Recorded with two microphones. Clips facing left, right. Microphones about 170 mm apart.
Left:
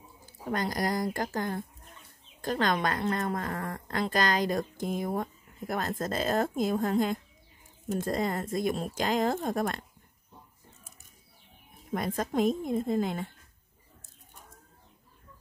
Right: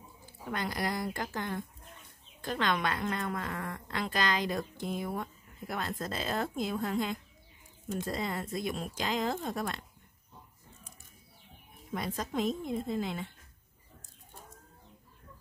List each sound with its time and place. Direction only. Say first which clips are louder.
0.5 s speech: left 4 dB; 40° left (ahead or behind)
11.9 s speech: left 5 dB; 50° left (ahead or behind)